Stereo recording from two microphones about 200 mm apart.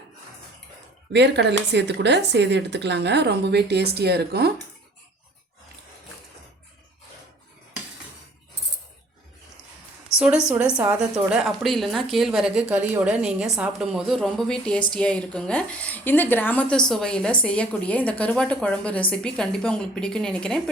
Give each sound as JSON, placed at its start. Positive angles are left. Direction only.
{"t": 1.1, "sound": "speech", "side_deg": -60}
{"t": 10.2, "sound": "a woman's voice", "side_deg": -5}